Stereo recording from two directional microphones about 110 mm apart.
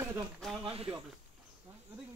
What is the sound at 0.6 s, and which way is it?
Speech, 55° right (ahead or behind).